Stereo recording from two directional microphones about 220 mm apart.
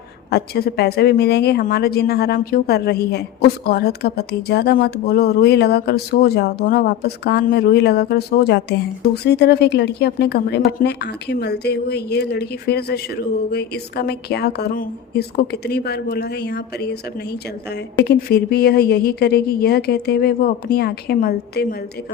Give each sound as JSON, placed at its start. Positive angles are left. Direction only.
{"t": 0.3, "sound": "speech", "side_deg": 45}